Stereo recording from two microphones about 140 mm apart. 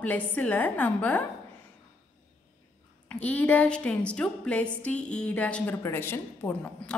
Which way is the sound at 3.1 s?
10° left (ahead or behind).